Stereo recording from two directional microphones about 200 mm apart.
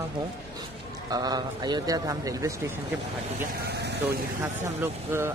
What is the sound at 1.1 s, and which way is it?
A man's voice, 20° right (ahead or behind).